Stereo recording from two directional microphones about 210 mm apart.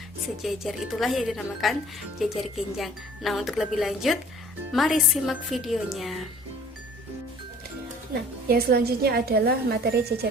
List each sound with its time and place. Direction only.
0.4 s speech: centre (ahead or behind)
8.4 s a woman's voice: 45° right (ahead or behind)